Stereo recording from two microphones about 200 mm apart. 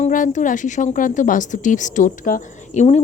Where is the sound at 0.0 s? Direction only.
40° left (ahead or behind).